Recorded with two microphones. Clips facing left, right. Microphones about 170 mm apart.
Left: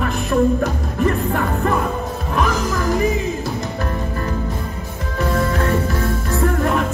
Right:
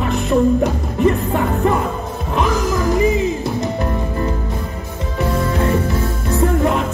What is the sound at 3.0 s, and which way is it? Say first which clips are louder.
Music: right 3 dB; 20° right (ahead or behind).